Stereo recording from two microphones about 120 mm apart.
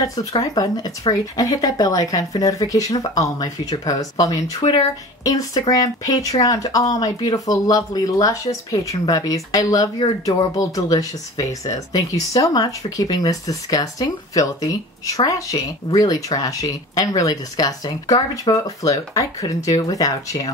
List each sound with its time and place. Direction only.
0.0 s speech: 30° left (ahead or behind)
4.6 s speech: 60° left (ahead or behind)
5.2 s speech: 30° left (ahead or behind)